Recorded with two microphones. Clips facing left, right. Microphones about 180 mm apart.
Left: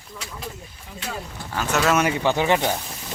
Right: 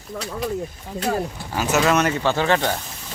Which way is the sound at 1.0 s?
50° right (ahead or behind).